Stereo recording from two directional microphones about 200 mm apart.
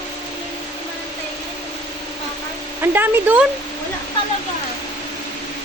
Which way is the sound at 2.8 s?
10° right (ahead or behind).